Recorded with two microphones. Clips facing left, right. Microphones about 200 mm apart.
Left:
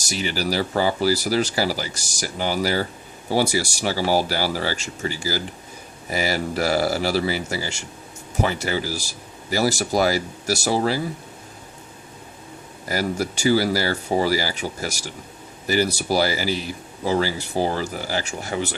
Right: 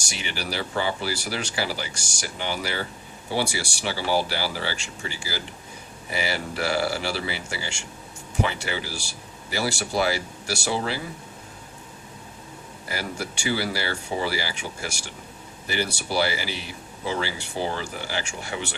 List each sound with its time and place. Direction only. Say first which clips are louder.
0.0 s a man's voice: left 8 dB; 40° left (ahead or behind)
12.9 s a man's voice: left 8 dB; 40° left (ahead or behind)